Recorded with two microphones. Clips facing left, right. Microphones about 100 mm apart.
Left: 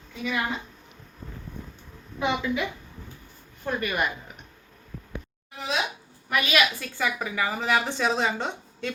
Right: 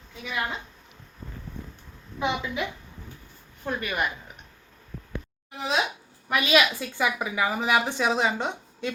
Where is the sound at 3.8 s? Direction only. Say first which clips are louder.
Left 1 dB; 10° left (ahead or behind).